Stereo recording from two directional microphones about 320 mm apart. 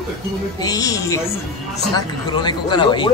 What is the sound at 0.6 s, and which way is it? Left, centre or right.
Speech, centre.